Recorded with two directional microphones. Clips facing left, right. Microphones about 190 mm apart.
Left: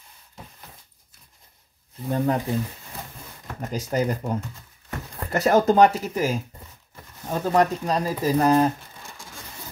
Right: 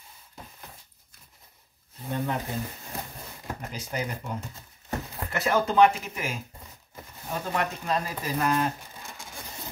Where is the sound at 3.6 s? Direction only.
40° left (ahead or behind).